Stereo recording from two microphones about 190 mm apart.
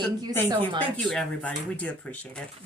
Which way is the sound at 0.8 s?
5° left (ahead or behind).